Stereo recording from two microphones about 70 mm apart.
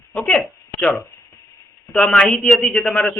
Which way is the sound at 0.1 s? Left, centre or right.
Centre.